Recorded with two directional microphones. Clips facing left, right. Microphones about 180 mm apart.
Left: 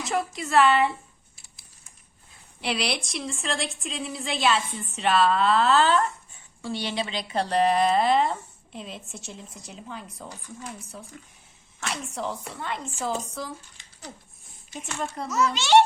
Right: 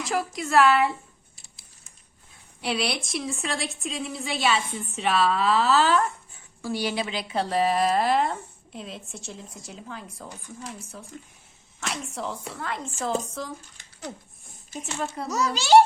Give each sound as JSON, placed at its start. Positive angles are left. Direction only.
{"t": 0.1, "sound": "a woman's voice", "side_deg": 0}
{"t": 2.6, "sound": "a woman's voice", "side_deg": 0}
{"t": 13.7, "sound": "a sound", "side_deg": -50}
{"t": 14.8, "sound": "a woman's voice", "side_deg": -5}
{"t": 15.3, "sound": "a child's voice", "side_deg": -35}